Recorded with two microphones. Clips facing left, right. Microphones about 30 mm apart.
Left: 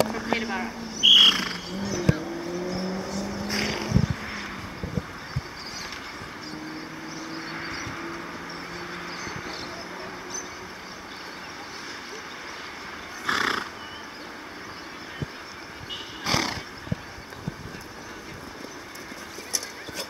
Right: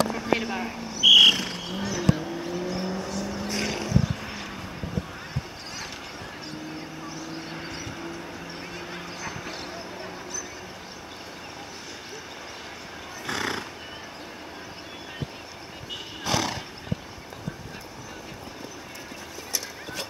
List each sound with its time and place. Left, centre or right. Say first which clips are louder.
0.0 s speech: even; centre
0.9 s bird: right 1 dB; centre
1.7 s a sound: right 2 dB; centre
2.3 s vehicle: even; centre
2.6 s vehicle: even; centre
3.4 s vehicle: left 2 dB; centre
4.0 s vehicle: left 1 dB; centre
5.0 s clip-clop: even; centre
7.2 s vehicle: left 3 dB; centre
9.2 s clip-clop: even; centre
13.3 s horse: left 5 dB; left
16.3 s horse: left 1 dB; centre